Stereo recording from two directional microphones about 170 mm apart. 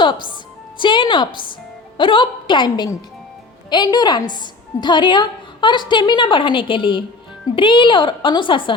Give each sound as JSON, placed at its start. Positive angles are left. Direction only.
{"t": 0.8, "sound": "a woman's voice", "side_deg": 30}